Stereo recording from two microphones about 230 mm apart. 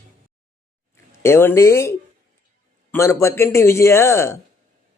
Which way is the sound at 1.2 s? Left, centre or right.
Centre.